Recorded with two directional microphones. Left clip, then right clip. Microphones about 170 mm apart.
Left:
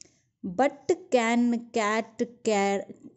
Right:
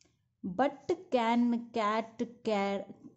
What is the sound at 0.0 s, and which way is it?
A woman's voice, 20° left (ahead or behind).